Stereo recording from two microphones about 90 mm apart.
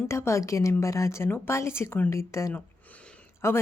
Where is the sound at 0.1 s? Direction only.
30° left (ahead or behind).